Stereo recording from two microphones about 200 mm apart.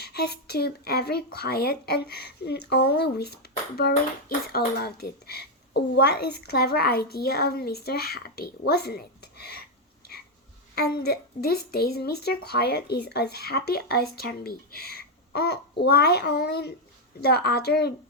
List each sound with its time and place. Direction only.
0.0 s a child's voice: 55° left (ahead or behind)
4.4 s a child's voice: 50° left (ahead or behind)
10.8 s a child's voice: 50° left (ahead or behind)